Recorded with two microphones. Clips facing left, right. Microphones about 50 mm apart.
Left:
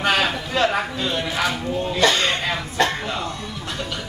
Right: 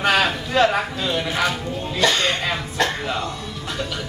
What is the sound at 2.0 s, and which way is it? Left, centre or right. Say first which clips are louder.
Music: even; centre.